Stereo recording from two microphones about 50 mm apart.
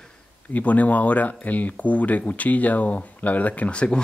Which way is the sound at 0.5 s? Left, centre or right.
Left.